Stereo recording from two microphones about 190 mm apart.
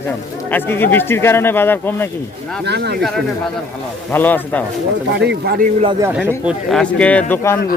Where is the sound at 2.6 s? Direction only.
60° right (ahead or behind).